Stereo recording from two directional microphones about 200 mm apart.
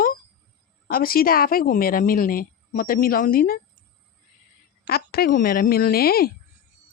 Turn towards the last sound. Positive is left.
turn(degrees=50)  # may be behind; listen again after turning